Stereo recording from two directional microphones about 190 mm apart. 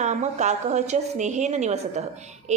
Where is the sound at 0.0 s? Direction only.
40° right (ahead or behind).